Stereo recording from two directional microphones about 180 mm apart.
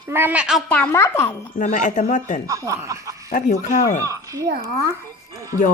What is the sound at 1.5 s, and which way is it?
Speech, 45° left (ahead or behind).